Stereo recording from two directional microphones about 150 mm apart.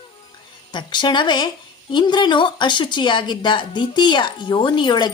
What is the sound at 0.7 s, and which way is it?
Speech, 30° left (ahead or behind).